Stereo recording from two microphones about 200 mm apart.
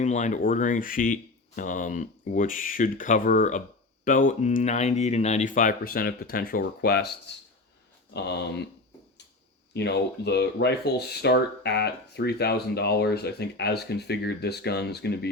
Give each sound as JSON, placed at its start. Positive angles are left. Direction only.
{"t": 0.0, "sound": "speech", "side_deg": 35}
{"t": 9.7, "sound": "speech", "side_deg": 55}